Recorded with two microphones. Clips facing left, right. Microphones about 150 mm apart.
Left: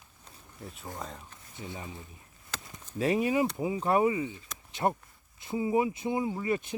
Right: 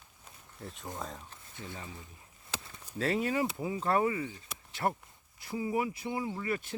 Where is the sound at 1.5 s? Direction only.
20° left (ahead or behind).